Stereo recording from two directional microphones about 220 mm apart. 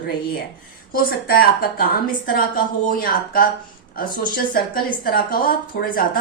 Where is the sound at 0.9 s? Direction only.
40° left (ahead or behind).